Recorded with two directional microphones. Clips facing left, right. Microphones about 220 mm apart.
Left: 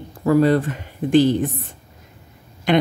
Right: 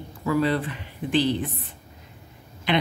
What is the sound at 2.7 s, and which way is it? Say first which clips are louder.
Speech: left 6 dB; 45° left (ahead or behind).